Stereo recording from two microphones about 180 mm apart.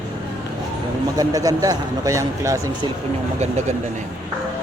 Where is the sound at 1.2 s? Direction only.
20° right (ahead or behind).